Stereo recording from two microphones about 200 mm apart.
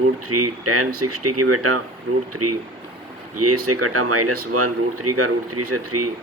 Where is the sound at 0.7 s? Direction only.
90° right.